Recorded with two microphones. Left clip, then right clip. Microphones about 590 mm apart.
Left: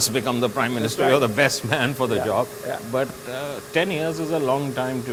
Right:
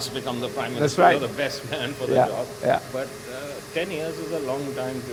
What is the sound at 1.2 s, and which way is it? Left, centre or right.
Speech, left.